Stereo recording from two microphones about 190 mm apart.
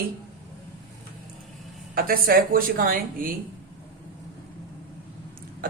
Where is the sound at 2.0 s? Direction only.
50° right (ahead or behind).